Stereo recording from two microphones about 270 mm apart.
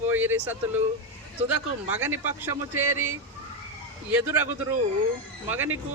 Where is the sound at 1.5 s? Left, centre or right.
Centre.